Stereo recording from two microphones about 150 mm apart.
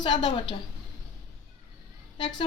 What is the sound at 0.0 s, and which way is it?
Speech, 35° left (ahead or behind).